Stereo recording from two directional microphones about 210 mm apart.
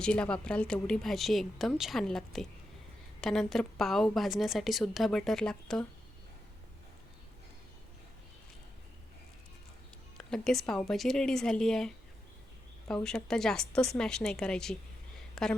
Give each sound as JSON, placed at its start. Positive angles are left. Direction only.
{"t": 0.0, "sound": "a woman's voice", "side_deg": 5}
{"t": 10.2, "sound": "a woman's voice", "side_deg": 0}